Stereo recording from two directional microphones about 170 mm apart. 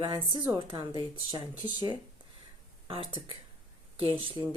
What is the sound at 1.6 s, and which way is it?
Speech, 25° left (ahead or behind).